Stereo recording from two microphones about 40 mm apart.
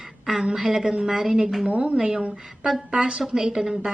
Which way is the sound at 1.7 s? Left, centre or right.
Right.